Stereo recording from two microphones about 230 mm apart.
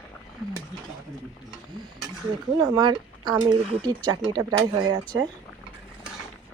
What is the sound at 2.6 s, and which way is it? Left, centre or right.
Speech, centre.